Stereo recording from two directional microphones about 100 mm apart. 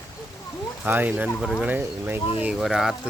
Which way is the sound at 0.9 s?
20° right (ahead or behind).